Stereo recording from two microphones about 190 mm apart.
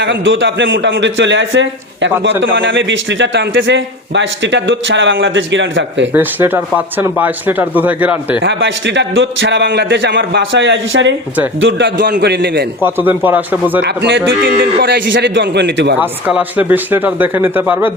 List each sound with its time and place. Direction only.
0.0 s a man's voice: 70° right (ahead or behind)
6.1 s speech: 10° right (ahead or behind)
8.4 s a man's voice: 70° right (ahead or behind)
12.8 s speech: 10° right (ahead or behind)
13.8 s a man's voice: 65° right (ahead or behind)
14.6 s a man's voice: 50° right (ahead or behind)
14.9 s a man's voice: 70° right (ahead or behind)
16.0 s speech: 10° right (ahead or behind)